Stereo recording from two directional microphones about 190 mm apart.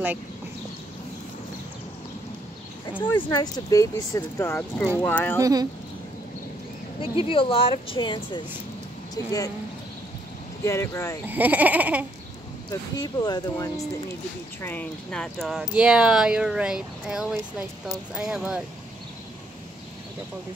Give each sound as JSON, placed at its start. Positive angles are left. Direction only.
{"t": 3.1, "sound": "speech", "side_deg": 20}
{"t": 5.4, "sound": "speech", "side_deg": -20}
{"t": 7.0, "sound": "speech", "side_deg": 30}
{"t": 10.6, "sound": "speech", "side_deg": 15}
{"t": 11.2, "sound": "a sound", "side_deg": -10}
{"t": 12.9, "sound": "speech", "side_deg": 20}
{"t": 14.6, "sound": "speech", "side_deg": 10}